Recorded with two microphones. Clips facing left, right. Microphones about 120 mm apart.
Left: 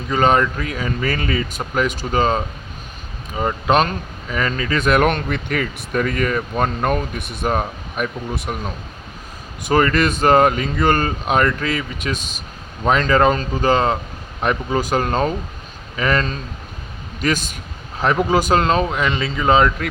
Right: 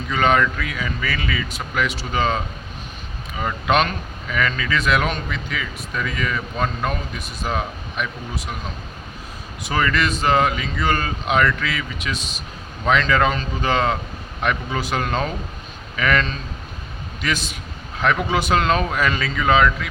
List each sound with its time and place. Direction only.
0.1 s speech: 35° left (ahead or behind); by 7.5 s 60° left (ahead or behind)
7.5 s speech: 45° left (ahead or behind)
9.6 s speech: 45° left (ahead or behind)
18.0 s speech: 35° left (ahead or behind)
18.9 s speech: 20° left (ahead or behind)